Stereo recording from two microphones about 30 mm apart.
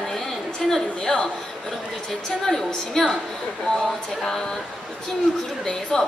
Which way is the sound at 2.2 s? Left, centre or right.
Centre.